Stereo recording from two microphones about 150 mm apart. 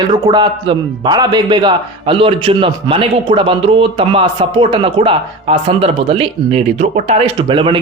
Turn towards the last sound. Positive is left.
turn(degrees=-35)  # may be behind; listen again after turning